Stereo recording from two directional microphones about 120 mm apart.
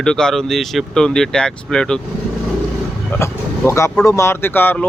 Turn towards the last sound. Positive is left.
turn(degrees=15)  # may be behind; listen again after turning